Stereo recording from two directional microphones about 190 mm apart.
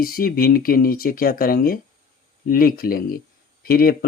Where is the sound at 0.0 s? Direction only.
50° left (ahead or behind).